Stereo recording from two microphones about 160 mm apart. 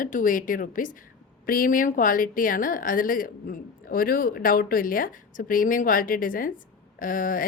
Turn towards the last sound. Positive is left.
turn(degrees=60)  # may be behind; listen again after turning